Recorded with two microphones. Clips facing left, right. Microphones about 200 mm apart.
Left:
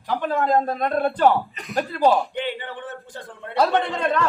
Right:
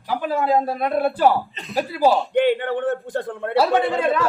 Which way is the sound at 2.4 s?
55° right (ahead or behind).